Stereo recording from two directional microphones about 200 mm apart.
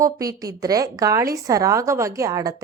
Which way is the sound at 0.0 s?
15° right (ahead or behind).